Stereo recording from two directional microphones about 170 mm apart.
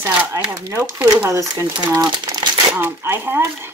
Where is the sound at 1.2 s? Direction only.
20° right (ahead or behind).